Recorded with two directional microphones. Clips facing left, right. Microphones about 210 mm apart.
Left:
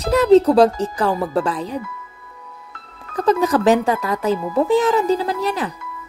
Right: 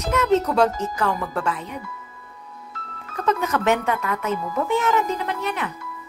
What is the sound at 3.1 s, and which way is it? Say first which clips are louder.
Speech: left 6 dB; 35° left (ahead or behind).